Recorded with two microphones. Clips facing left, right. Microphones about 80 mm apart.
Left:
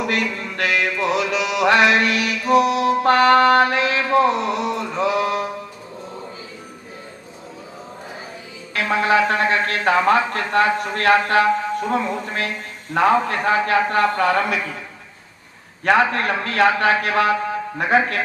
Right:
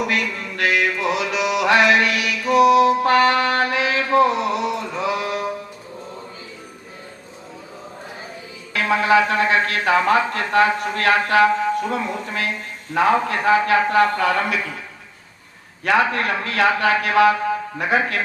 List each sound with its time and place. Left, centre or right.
0.1 s music: left
4.1 s a sound: left
8.7 s music: left
9.2 s a man's voice: left
15.8 s a man's voice: left